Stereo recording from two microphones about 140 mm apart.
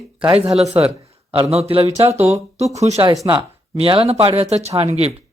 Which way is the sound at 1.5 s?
45° right (ahead or behind).